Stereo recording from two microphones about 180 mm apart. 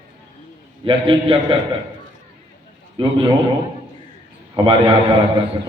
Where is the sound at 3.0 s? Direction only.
30° right (ahead or behind).